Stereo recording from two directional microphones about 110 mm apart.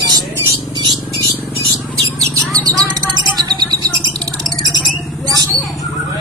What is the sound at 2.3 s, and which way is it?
Bird, 35° right (ahead or behind).